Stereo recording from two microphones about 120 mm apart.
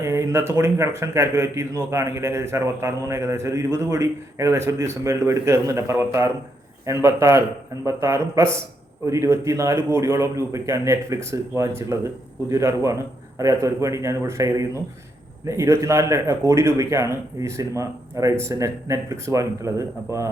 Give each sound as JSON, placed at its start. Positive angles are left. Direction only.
{"t": 0.0, "sound": "speech", "side_deg": -25}